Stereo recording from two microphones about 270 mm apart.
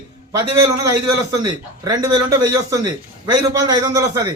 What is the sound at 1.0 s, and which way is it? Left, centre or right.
Speech, right.